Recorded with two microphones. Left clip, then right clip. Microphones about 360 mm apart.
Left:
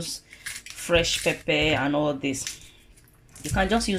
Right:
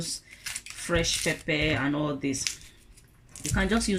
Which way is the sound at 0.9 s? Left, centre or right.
Centre.